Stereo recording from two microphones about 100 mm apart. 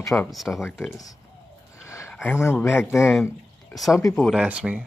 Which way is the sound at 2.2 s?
25° left (ahead or behind).